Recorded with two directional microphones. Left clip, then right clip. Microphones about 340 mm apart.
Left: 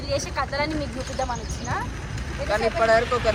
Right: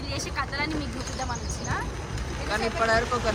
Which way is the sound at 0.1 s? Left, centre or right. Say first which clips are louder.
Left 6 dB; centre.